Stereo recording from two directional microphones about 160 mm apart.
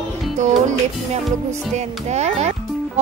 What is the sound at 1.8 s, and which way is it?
Speech, 45° right (ahead or behind).